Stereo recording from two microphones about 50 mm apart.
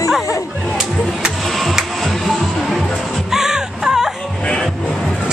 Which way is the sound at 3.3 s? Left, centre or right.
Centre.